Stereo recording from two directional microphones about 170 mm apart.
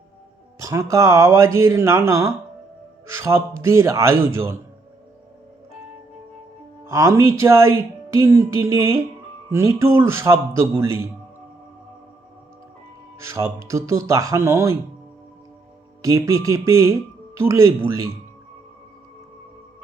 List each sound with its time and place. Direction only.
0.6 s speech: 15° right (ahead or behind)
6.8 s speech: 20° right (ahead or behind)
13.1 s speech: 15° right (ahead or behind)
16.0 s speech: 20° right (ahead or behind)